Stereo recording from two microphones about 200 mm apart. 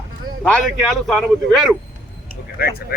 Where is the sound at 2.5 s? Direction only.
50° left (ahead or behind).